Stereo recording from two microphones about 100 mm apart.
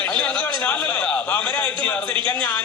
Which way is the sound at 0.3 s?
20° left (ahead or behind).